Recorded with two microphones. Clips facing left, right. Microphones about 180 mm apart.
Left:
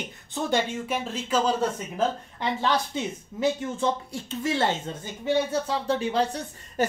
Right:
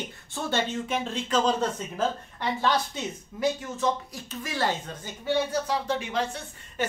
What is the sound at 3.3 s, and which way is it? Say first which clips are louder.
A woman's voice: left 2 dB; 25° left (ahead or behind).